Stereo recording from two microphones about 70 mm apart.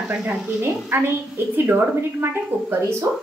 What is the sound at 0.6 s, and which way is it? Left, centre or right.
A woman's voice, right.